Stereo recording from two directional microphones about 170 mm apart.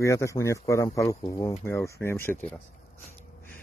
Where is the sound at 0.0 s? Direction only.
20° left (ahead or behind).